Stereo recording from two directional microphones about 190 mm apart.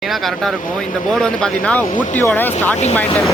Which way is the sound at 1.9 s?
40° left (ahead or behind).